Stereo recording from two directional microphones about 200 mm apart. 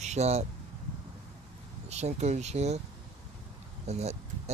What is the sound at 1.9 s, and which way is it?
Speech, 35° right (ahead or behind).